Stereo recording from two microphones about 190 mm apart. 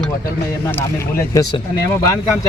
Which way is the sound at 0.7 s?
15° left (ahead or behind).